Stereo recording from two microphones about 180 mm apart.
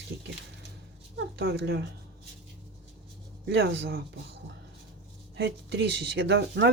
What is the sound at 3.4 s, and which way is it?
Speech, 85° right.